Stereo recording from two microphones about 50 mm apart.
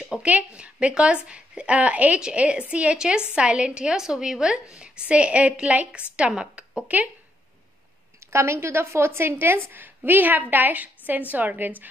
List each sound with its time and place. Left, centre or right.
0.0 s a sound: centre
0.3 s a woman's voice: right
8.3 s a woman's voice: right